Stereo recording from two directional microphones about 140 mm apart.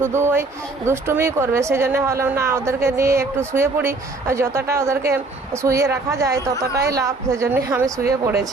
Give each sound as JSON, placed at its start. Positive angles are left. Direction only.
{"t": 0.0, "sound": "a man's voice", "side_deg": -15}